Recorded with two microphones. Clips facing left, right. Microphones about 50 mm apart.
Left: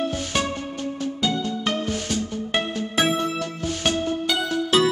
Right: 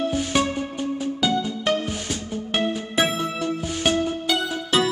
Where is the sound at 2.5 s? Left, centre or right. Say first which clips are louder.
Right 1 dB; centre.